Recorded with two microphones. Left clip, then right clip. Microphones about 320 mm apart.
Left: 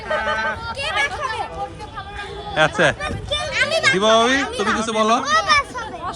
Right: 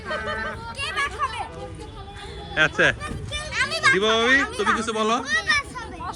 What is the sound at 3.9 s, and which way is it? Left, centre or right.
Speech, centre.